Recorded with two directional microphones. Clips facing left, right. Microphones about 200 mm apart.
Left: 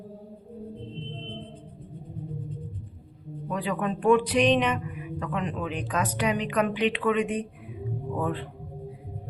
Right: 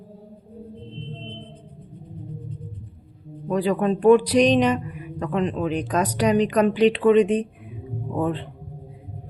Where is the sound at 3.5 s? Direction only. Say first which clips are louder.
Right 8 dB; 40° right (ahead or behind).